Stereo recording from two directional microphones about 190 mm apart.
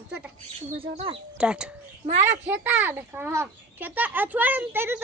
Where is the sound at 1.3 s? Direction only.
5° right (ahead or behind).